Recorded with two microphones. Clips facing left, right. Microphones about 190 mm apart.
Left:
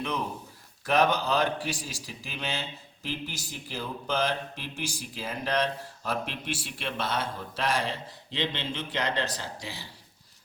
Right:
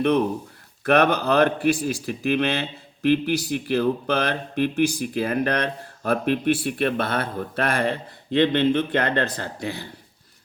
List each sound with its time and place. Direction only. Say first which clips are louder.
0.9 s speech: right 6 dB; 60° right (ahead or behind)